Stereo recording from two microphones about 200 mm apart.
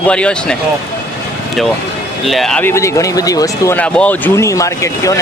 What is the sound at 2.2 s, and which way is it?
Speech, centre (ahead or behind).